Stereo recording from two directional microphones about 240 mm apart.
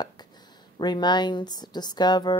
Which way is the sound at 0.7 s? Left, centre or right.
Centre.